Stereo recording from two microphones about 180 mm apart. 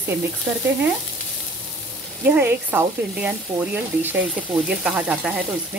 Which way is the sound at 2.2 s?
10° right (ahead or behind).